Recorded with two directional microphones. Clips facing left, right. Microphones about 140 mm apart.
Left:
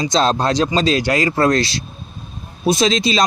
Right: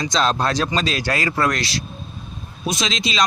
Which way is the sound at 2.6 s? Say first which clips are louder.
Left 8 dB; 35° left (ahead or behind).